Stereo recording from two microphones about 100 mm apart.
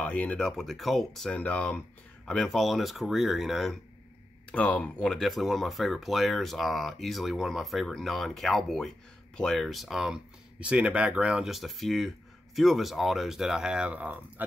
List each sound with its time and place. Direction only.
0.0 s speech: 15° left (ahead or behind)
0.4 s speech: centre (ahead or behind)
4.5 s speech: 15° left (ahead or behind); by 14.4 s 15° right (ahead or behind)